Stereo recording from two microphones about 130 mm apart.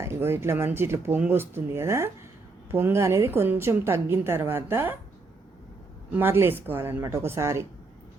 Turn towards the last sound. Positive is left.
turn(degrees=-20)  # may be behind; listen again after turning